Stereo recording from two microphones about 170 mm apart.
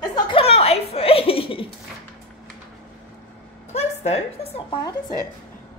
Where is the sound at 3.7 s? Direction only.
40° left (ahead or behind).